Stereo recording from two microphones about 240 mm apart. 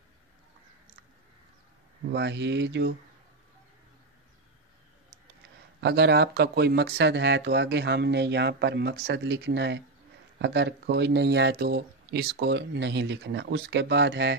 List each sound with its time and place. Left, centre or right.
2.0 s speech: right
5.8 s speech: right